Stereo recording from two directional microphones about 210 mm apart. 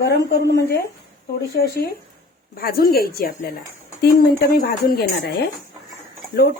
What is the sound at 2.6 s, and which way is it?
Speech, 45° left (ahead or behind).